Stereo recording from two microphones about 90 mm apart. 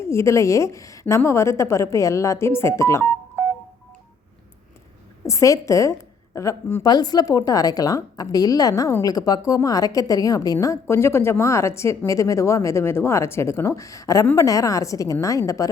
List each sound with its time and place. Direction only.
0.0 s a woman's voice: 30° left (ahead or behind)
5.2 s a woman's voice: 35° left (ahead or behind)
6.8 s a woman's voice: 50° left (ahead or behind)